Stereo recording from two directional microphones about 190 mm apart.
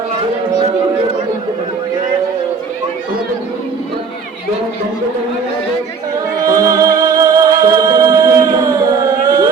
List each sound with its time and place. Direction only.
6.4 s music: 20° right (ahead or behind)